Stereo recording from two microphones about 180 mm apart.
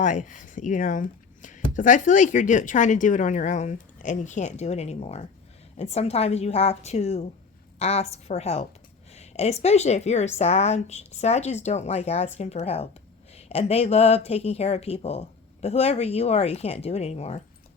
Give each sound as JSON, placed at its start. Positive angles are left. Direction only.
{"t": 0.0, "sound": "speech", "side_deg": 45}